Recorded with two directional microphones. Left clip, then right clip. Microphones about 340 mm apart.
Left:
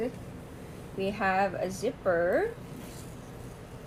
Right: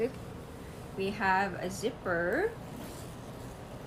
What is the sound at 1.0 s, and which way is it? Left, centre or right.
Speech, centre.